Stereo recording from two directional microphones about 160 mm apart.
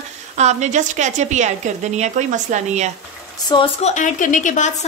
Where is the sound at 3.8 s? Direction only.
50° left (ahead or behind).